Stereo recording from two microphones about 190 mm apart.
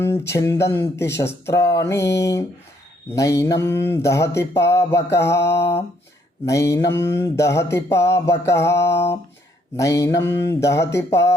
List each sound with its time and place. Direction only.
0.0 s mantra: 15° left (ahead or behind)